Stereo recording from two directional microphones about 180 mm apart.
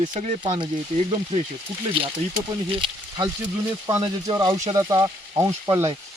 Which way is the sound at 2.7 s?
25° right (ahead or behind).